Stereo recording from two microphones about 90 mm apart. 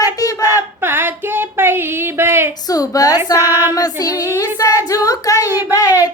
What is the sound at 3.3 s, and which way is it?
Female singing, 25° right (ahead or behind).